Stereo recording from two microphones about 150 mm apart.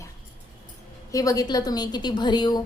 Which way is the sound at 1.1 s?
25° left (ahead or behind).